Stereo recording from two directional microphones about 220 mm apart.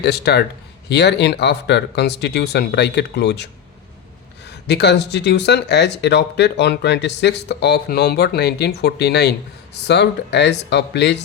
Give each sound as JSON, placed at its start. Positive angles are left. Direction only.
{"t": 0.0, "sound": "speech", "side_deg": 50}